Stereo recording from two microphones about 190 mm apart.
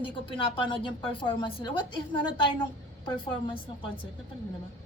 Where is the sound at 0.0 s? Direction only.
25° left (ahead or behind).